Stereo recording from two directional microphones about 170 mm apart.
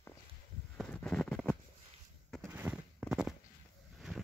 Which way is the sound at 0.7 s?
5° left (ahead or behind).